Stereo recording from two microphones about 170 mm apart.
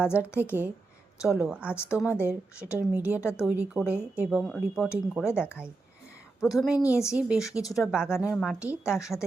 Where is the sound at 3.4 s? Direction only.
10° right (ahead or behind).